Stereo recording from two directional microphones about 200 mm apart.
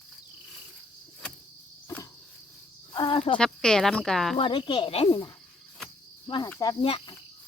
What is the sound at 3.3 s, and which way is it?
Speech, 5° left (ahead or behind).